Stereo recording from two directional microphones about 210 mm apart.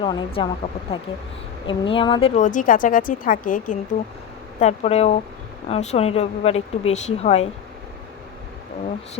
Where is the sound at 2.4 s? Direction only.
40° left (ahead or behind).